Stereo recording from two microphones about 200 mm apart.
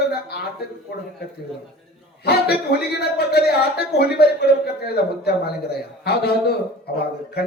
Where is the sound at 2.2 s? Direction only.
50° left (ahead or behind).